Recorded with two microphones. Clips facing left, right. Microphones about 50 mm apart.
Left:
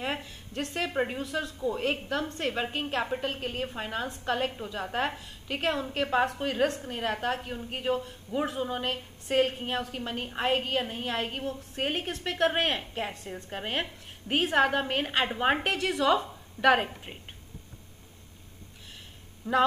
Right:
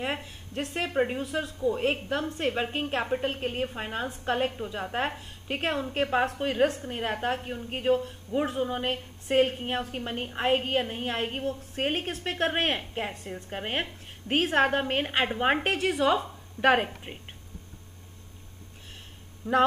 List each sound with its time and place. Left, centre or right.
0.0 s speech: centre
3.2 s a woman's voice: right
5.2 s a woman's voice: right
5.7 s speech: centre
7.3 s speech: centre
8.8 s a woman's voice: centre
13.7 s a sound: centre
14.3 s a woman's voice: right
15.2 s speech: centre
15.6 s speech: centre
19.4 s speech: centre